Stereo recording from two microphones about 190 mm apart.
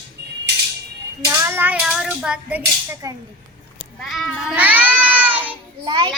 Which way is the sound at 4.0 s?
Centre (ahead or behind).